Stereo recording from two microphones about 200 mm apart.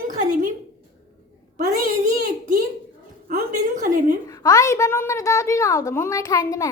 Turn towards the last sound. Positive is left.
turn(degrees=15)  # may be behind; listen again after turning